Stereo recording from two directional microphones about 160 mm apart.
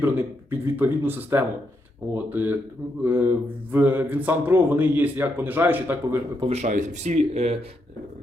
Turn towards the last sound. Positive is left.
turn(degrees=-40)  # may be behind; listen again after turning